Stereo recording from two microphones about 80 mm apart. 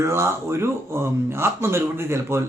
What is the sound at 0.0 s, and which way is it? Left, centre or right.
Speech, right.